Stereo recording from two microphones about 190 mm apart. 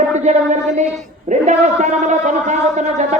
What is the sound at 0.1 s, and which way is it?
A man's voice, 40° right (ahead or behind).